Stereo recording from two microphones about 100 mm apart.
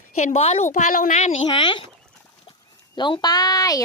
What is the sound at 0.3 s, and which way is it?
Speech, 90° left.